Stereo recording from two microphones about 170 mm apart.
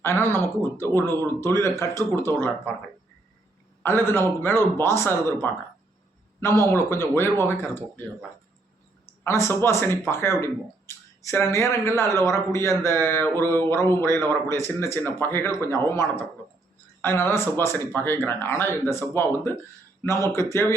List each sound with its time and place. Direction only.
0.0 s speech: 15° left (ahead or behind)
3.8 s speech: 15° left (ahead or behind)
9.2 s speech: 15° left (ahead or behind)